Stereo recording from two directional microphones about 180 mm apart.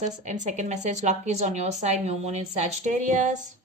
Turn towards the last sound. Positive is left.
turn(degrees=-45)  # may be behind; listen again after turning